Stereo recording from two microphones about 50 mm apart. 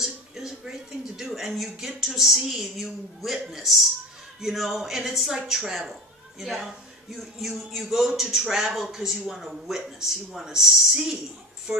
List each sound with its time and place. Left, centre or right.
0.0 s speech: centre